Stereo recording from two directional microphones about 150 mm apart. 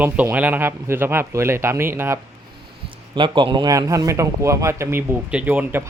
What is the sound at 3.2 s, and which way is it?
A man's voice, 35° right (ahead or behind).